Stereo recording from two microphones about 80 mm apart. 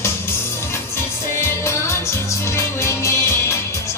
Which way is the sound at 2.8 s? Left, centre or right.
Left.